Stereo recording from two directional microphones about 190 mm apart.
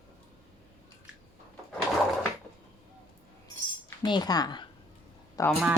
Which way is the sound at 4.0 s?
20° left (ahead or behind).